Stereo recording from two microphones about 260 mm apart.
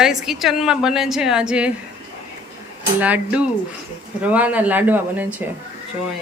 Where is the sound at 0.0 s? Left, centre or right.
Centre.